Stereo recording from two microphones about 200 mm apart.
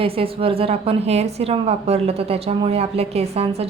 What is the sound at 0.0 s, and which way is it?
A woman's voice, 30° right (ahead or behind).